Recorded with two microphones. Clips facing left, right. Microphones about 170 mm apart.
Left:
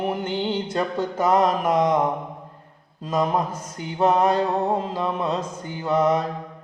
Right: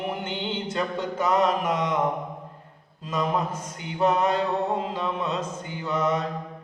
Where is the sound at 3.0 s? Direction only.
35° left (ahead or behind).